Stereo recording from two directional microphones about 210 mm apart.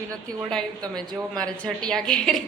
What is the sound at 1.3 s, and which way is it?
A woman's voice, 5° left (ahead or behind).